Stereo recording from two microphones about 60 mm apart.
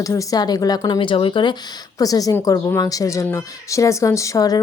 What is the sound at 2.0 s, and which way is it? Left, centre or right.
A woman's voice, left.